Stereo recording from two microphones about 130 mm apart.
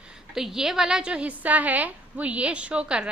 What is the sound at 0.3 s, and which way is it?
A woman's voice, 5° right (ahead or behind).